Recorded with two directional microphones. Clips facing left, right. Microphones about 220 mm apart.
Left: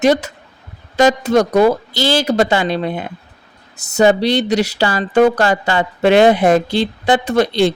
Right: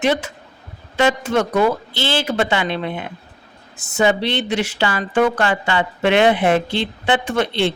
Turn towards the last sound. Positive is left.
turn(degrees=40)  # may be behind; listen again after turning